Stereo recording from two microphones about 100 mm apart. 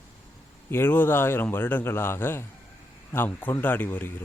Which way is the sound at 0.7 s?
20° left (ahead or behind).